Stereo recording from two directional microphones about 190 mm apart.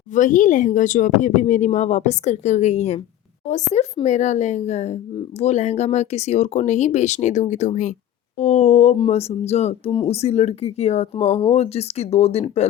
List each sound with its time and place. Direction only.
0.1 s speech: 40° left (ahead or behind)